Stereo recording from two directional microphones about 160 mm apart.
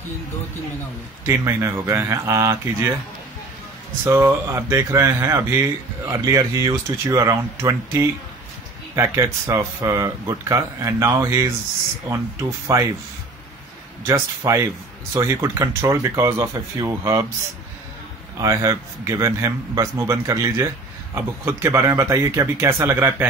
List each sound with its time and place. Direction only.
1.2 s speech: 15° right (ahead or behind)
4.0 s a man's voice: 15° right (ahead or behind)
14.0 s a man's voice: 20° right (ahead or behind)
18.4 s a man's voice: 20° right (ahead or behind)